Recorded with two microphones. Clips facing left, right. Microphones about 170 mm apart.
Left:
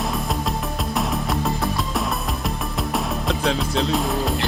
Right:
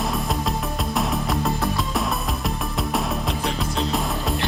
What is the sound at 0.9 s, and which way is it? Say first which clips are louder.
Music: even; centre (ahead or behind).